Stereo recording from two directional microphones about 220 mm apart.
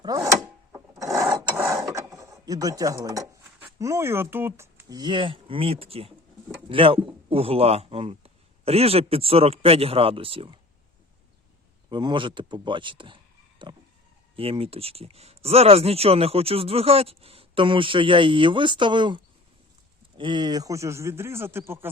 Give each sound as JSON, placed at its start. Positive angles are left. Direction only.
{"t": 0.0, "sound": "a sound", "side_deg": -15}
{"t": 0.3, "sound": "a sound", "side_deg": 0}
{"t": 1.3, "sound": "mechanisms", "side_deg": -15}
{"t": 6.7, "sound": "speech", "side_deg": -25}
{"t": 11.9, "sound": "speech", "side_deg": -20}
{"t": 13.6, "sound": "vehicle", "side_deg": -20}
{"t": 14.3, "sound": "a man's voice", "side_deg": -25}